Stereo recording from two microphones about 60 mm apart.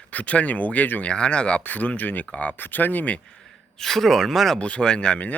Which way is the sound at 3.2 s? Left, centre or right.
Centre.